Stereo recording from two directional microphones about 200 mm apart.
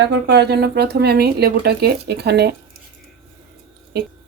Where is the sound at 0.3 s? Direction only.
55° right (ahead or behind).